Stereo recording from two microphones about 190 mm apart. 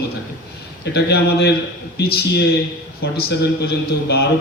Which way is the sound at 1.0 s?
60° left (ahead or behind).